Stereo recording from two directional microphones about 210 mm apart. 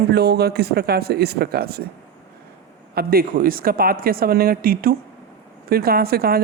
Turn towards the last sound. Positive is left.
turn(degrees=-45)  # may be behind; listen again after turning